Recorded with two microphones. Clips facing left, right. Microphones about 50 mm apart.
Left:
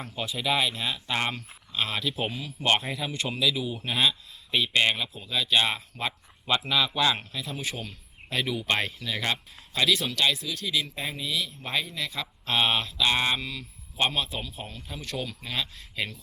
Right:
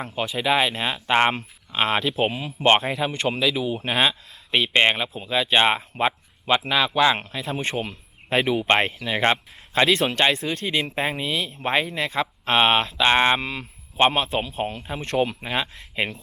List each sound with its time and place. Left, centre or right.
0.0 s speech: right